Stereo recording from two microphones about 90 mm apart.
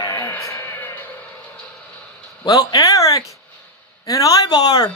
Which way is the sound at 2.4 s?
40° left (ahead or behind).